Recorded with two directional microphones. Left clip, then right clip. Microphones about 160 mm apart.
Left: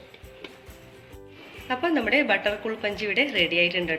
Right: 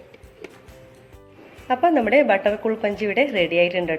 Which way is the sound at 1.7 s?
45° right (ahead or behind).